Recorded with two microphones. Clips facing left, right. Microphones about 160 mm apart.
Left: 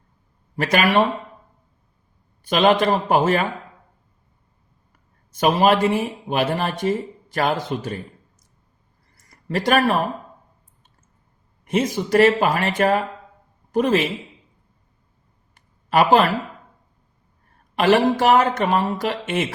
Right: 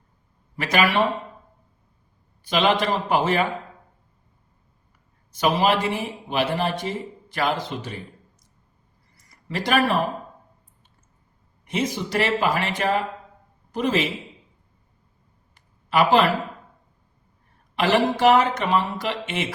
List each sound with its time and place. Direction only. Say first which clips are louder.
0.5 s speech: left 3 dB; 45° left (ahead or behind)
2.4 s speech: left 4 dB; 50° left (ahead or behind)
5.4 s speech: left 4 dB; 45° left (ahead or behind)
9.1 s a sound: left 5 dB; 45° left (ahead or behind)
11.6 s speech: left 4 dB; 45° left (ahead or behind)
15.5 s a sound: left 3 dB; 45° left (ahead or behind)
17.7 s speech: left 4 dB; 45° left (ahead or behind)